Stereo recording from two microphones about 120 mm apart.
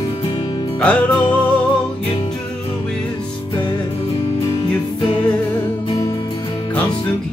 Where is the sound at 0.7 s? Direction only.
10° left (ahead or behind).